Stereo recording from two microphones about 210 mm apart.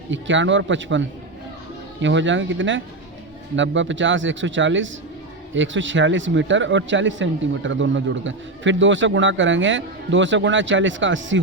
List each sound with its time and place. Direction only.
0.1 s speech: 60° right (ahead or behind)